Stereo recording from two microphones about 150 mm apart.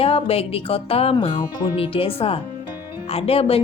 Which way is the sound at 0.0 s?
40° left (ahead or behind).